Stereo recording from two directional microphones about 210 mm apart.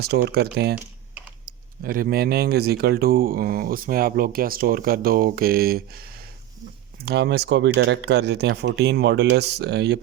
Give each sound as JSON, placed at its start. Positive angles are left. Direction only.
{"t": 0.0, "sound": "speech", "side_deg": -50}
{"t": 1.8, "sound": "speech", "side_deg": -45}
{"t": 7.0, "sound": "speech", "side_deg": -55}